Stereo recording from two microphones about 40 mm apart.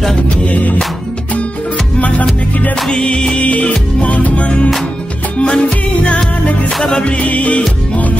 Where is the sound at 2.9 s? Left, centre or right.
Left.